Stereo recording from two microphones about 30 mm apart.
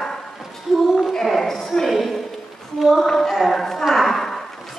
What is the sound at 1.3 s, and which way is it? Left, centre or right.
Speech, centre.